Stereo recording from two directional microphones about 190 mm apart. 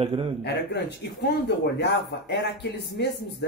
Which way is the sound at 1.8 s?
60° left (ahead or behind).